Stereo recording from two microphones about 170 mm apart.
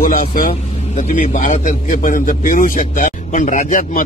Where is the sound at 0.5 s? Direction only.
40° left (ahead or behind).